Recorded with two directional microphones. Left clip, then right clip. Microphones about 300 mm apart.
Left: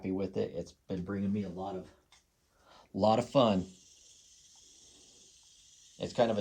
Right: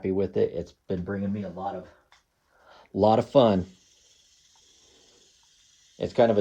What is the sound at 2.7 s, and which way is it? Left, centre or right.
Speech, right.